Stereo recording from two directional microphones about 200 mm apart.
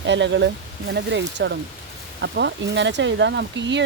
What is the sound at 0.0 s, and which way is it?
Speech, 65° right (ahead or behind).